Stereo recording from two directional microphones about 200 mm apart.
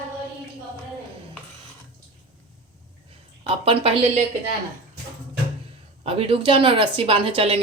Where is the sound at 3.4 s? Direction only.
30° right (ahead or behind).